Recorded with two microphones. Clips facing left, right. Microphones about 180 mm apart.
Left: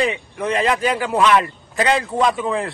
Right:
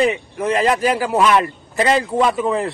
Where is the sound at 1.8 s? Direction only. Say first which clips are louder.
Right 2 dB; 30° right (ahead or behind).